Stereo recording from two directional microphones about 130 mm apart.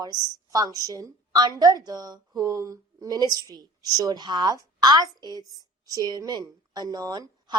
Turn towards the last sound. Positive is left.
turn(degrees=-30)  # may be behind; listen again after turning